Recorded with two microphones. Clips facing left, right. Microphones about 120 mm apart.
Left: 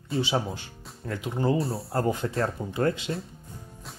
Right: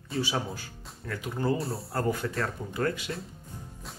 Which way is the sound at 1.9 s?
25° left (ahead or behind).